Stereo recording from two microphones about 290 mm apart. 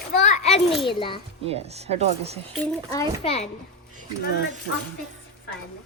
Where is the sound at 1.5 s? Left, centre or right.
Right.